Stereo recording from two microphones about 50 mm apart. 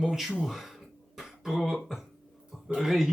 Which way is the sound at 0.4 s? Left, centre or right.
Centre.